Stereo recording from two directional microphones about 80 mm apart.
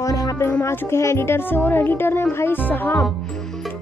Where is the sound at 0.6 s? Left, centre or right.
Left.